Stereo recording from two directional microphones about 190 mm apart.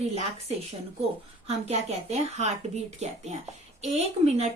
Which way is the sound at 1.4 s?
35° right (ahead or behind).